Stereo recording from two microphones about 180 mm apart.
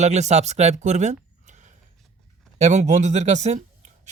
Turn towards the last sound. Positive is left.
turn(degrees=-40)  # may be behind; listen again after turning